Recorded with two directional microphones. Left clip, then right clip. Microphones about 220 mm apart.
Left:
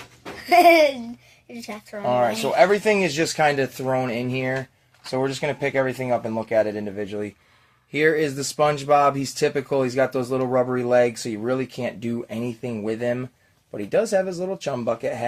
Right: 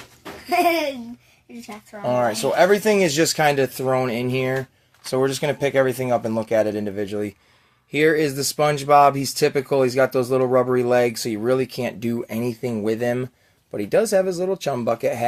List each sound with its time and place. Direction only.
0.4 s speech: 40° left (ahead or behind)
2.0 s speech: 40° right (ahead or behind)